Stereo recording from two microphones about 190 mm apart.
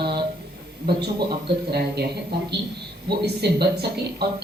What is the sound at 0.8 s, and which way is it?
Speech, 55° right (ahead or behind).